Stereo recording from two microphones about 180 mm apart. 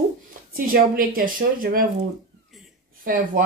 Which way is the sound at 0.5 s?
50° right (ahead or behind).